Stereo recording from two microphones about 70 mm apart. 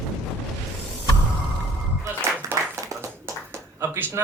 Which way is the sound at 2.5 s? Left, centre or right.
Right.